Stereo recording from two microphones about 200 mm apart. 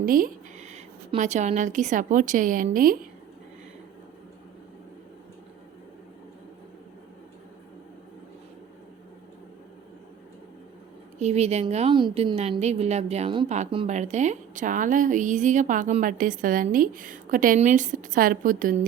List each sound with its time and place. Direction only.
0.0 s speech: 45° right (ahead or behind)
11.2 s a woman's voice: 35° right (ahead or behind)